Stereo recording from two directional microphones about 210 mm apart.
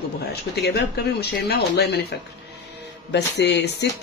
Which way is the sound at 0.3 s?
50° left (ahead or behind).